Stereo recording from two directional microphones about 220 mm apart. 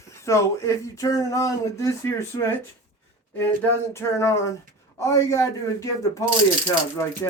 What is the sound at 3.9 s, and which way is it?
Speech, 15° left (ahead or behind).